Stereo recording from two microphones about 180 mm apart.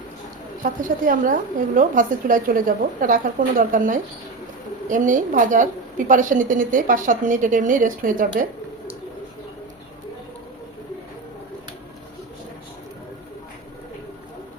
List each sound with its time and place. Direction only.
0.6 s a woman's voice: 50° right (ahead or behind)